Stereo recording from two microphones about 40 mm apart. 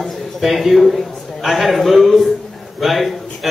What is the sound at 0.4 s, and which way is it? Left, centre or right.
A man's voice, centre.